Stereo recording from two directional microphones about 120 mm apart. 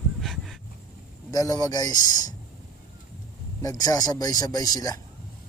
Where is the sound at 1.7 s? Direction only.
30° left (ahead or behind).